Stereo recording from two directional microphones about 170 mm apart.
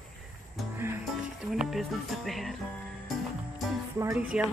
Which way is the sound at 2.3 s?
Centre (ahead or behind).